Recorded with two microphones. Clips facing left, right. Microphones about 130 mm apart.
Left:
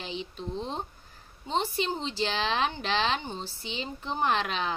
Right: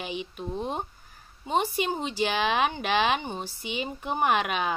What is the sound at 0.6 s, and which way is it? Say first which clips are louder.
Speech: right 4 dB; 10° right (ahead or behind).